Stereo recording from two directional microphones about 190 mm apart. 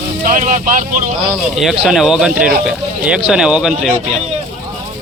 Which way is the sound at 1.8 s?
Centre (ahead or behind).